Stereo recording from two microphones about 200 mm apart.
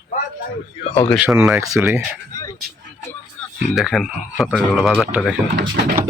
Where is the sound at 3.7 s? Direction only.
Centre (ahead or behind).